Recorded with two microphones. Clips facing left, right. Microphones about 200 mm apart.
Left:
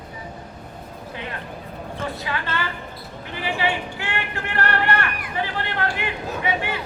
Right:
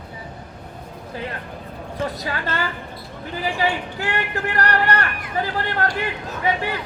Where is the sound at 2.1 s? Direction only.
40° right (ahead or behind).